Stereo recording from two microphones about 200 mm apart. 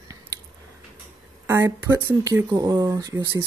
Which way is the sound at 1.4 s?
15° right (ahead or behind).